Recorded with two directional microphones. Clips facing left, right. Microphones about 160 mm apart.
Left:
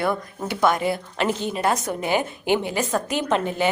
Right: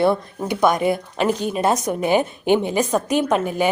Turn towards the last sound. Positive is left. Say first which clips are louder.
# right 4 dB
turn(degrees=-15)  # may be behind; listen again after turning